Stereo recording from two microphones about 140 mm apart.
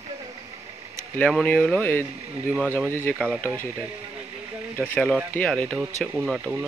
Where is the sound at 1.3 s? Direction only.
10° left (ahead or behind).